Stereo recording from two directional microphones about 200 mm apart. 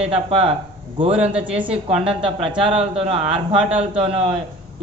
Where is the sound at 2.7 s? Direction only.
30° right (ahead or behind).